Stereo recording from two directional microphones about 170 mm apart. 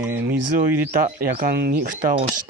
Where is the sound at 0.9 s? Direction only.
55° right (ahead or behind).